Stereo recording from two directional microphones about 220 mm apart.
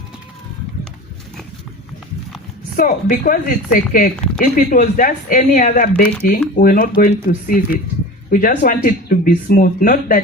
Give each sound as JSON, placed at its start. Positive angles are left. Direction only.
{"t": 2.7, "sound": "speech", "side_deg": 40}